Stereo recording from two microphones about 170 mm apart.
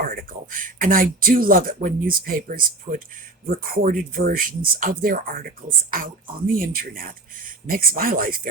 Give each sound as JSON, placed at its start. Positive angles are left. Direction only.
{"t": 0.0, "sound": "speech", "side_deg": -60}